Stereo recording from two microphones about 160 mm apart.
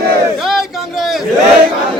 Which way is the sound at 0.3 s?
Centre (ahead or behind).